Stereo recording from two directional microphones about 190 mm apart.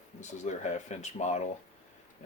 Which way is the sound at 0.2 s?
40° left (ahead or behind).